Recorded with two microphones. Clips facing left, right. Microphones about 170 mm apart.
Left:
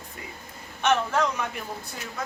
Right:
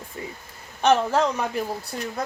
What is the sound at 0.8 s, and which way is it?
Speech, 30° right (ahead or behind).